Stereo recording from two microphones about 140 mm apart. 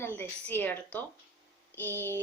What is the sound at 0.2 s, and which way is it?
A woman's voice, 10° left (ahead or behind).